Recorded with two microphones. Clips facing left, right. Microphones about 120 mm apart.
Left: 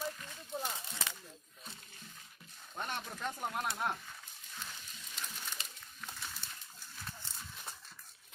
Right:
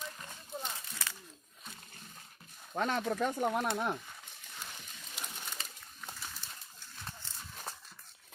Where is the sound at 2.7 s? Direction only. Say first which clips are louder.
Right 9 dB; 90° right.